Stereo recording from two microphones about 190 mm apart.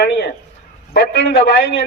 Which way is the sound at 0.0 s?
60° left (ahead or behind).